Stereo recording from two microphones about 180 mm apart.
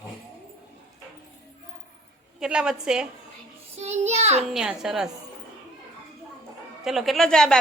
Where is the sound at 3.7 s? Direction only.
40° right (ahead or behind).